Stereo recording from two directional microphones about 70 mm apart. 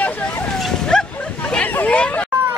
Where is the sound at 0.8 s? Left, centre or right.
Centre.